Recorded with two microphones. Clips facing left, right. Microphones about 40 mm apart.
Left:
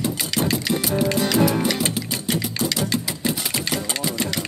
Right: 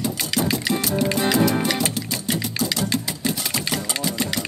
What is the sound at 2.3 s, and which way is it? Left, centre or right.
Music, left.